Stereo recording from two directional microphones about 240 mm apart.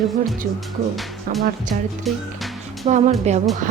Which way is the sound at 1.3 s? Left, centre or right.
Right.